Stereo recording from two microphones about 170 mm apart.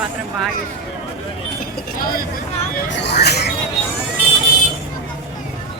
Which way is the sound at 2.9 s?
85° left.